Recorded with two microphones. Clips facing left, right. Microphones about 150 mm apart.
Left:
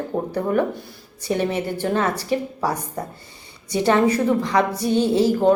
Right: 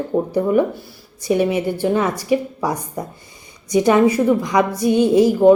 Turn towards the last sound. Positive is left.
turn(degrees=-15)  # may be behind; listen again after turning